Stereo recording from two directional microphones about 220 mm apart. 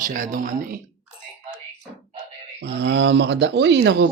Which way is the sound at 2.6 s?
50° right (ahead or behind).